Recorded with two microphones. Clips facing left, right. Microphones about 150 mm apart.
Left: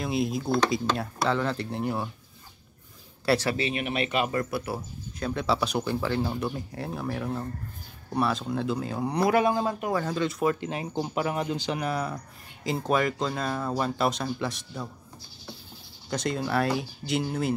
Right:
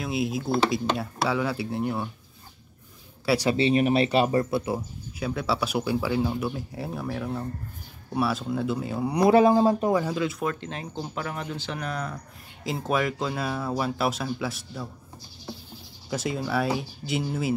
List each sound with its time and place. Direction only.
0.0 s speech: centre (ahead or behind)
3.5 s speech: 35° right (ahead or behind)
4.7 s speech: 5° right (ahead or behind)
9.2 s speech: 30° right (ahead or behind)
9.9 s speech: 5° right (ahead or behind)
10.4 s speech: 10° left (ahead or behind)
16.1 s speech: 5° right (ahead or behind)